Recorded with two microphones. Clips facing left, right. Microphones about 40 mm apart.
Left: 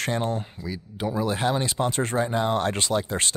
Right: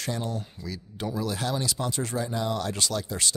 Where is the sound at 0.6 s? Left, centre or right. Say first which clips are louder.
Left 4 dB; centre; by 3.3 s left.